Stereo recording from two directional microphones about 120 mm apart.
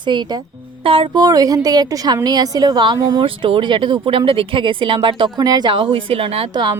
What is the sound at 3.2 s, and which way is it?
A woman's voice, 45° right (ahead or behind).